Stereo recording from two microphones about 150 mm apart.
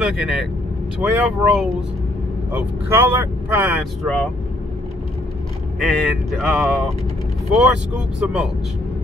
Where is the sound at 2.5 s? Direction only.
10° right (ahead or behind).